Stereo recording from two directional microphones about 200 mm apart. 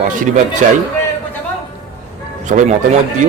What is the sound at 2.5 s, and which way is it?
Speech, 40° right (ahead or behind).